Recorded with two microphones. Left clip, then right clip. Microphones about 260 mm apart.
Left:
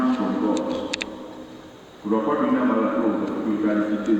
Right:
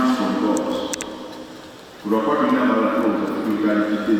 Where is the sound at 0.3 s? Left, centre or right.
Centre.